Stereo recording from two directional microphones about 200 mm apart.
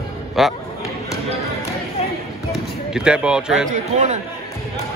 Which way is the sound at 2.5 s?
5° right (ahead or behind).